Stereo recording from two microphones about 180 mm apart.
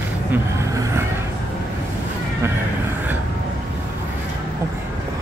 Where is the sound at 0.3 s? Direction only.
15° right (ahead or behind).